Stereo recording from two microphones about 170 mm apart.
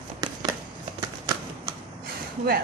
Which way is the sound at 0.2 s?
25° right (ahead or behind).